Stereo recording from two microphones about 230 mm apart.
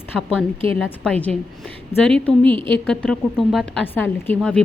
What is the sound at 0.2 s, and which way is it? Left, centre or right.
A woman's voice, centre.